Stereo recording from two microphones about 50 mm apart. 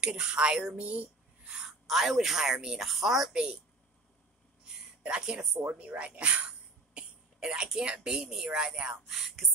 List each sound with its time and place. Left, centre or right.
0.0 s a woman's voice: centre
0.7 s a sound: right
1.9 s a woman's voice: centre
5.0 s speech: centre
5.7 s speech: right
9.0 s speech: centre